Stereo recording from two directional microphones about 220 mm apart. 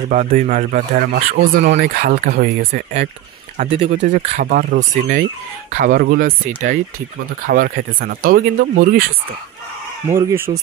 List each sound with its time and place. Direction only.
0.1 s speech: 35° right (ahead or behind)
3.5 s speech: 30° right (ahead or behind)
10.0 s speech: 10° right (ahead or behind)